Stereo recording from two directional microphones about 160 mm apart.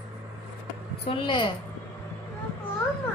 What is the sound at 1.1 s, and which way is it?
Speech, 30° left (ahead or behind).